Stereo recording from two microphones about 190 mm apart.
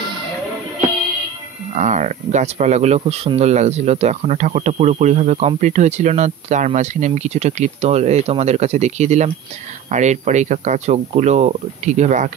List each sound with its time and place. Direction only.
1.8 s speech: 40° right (ahead or behind)